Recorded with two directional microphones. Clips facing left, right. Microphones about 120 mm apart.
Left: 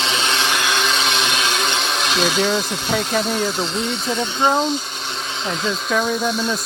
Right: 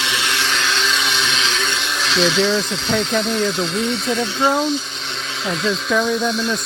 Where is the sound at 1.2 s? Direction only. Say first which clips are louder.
Left 1 dB; 50° left (ahead or behind).